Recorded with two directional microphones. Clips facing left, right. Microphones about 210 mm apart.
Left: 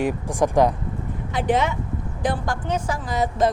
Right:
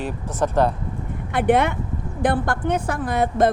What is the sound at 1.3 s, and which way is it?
A woman's voice, 60° right (ahead or behind).